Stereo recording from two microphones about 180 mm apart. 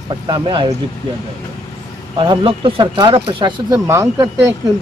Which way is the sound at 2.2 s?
30° right (ahead or behind).